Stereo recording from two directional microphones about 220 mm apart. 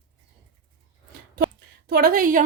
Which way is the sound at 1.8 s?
40° right (ahead or behind).